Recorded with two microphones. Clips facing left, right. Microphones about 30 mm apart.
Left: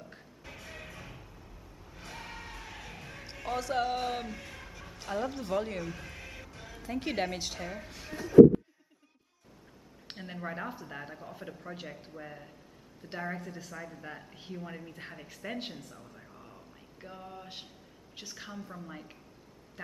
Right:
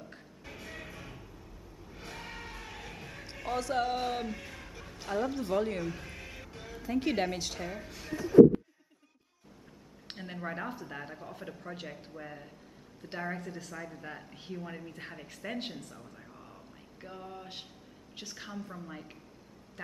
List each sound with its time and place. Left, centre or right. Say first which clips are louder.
0.0 s music: right 1 dB; centre
10.0 s speech: even; centre